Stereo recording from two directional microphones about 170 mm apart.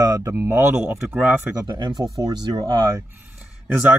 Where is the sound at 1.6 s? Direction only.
25° right (ahead or behind).